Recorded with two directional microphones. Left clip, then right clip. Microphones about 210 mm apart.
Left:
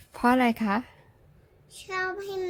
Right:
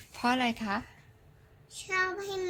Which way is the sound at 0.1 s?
50° left (ahead or behind).